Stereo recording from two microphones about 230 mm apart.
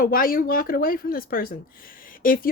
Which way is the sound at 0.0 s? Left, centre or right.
Left.